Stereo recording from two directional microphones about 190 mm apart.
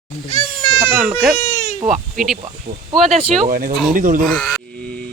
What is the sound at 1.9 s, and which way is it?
Speech, centre (ahead or behind).